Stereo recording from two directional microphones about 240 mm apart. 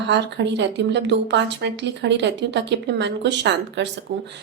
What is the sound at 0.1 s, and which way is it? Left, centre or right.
Speech, right.